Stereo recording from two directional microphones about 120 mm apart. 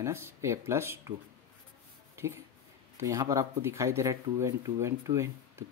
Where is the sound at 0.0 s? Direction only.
25° right (ahead or behind).